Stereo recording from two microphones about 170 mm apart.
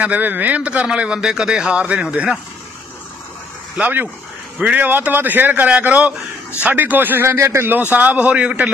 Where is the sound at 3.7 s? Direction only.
10° right (ahead or behind).